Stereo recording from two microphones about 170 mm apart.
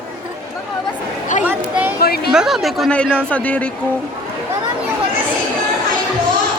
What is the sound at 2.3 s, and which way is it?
A woman's voice, centre (ahead or behind).